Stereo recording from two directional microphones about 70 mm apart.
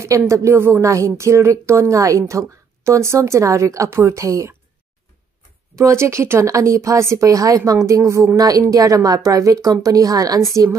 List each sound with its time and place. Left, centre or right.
0.3 s speech: right
5.8 s a woman's voice: right